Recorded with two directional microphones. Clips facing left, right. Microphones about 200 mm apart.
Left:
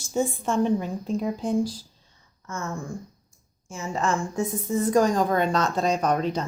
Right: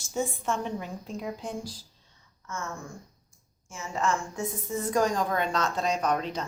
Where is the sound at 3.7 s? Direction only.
35° left (ahead or behind).